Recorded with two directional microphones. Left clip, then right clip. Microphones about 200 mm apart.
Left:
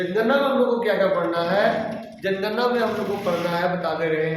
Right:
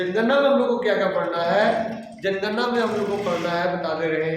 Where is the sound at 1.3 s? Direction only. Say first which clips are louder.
Right 1 dB; 15° right (ahead or behind).